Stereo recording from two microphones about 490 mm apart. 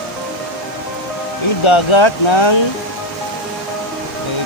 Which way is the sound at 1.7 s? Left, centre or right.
Left.